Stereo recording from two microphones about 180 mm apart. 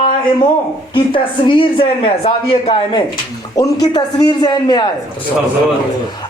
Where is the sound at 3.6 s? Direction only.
20° left (ahead or behind).